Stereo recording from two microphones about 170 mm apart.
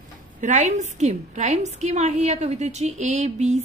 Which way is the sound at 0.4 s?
45° right (ahead or behind).